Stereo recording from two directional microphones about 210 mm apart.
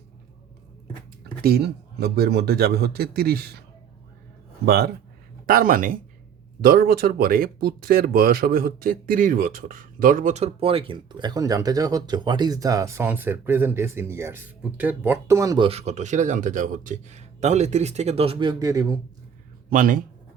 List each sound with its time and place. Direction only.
1.4 s a man's voice: 45° right (ahead or behind)
4.6 s a man's voice: 50° right (ahead or behind); by 18.9 s 15° right (ahead or behind)
19.7 s speech: 40° right (ahead or behind)